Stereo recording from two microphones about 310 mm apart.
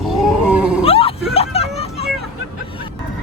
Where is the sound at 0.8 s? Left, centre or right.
Centre.